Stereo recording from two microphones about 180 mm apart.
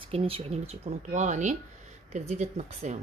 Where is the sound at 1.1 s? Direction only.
40° right (ahead or behind).